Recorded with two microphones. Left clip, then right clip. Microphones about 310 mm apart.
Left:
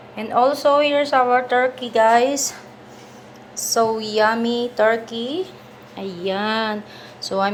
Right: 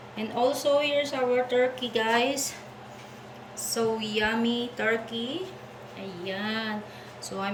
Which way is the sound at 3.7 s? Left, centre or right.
Centre.